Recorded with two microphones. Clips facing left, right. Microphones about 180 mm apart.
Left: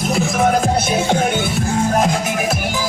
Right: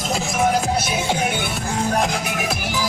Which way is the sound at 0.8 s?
45° left (ahead or behind).